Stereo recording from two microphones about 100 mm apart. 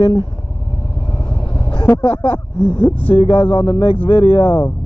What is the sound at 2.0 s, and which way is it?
Speech, 20° left (ahead or behind).